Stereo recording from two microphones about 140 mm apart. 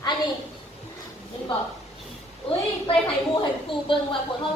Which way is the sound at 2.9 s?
40° left (ahead or behind).